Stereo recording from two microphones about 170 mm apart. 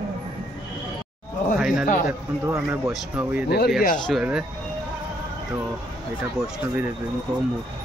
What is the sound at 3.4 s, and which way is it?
Speech, 70° left (ahead or behind).